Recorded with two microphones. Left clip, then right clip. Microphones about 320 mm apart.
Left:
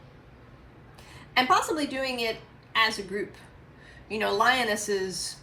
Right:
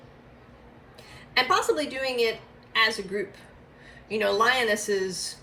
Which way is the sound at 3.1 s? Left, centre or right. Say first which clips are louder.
Right 2 dB; centre.